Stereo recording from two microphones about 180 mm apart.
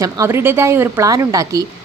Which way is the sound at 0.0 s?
15° right (ahead or behind).